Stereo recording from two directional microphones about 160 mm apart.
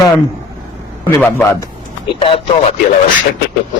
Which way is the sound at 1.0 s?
10° left (ahead or behind).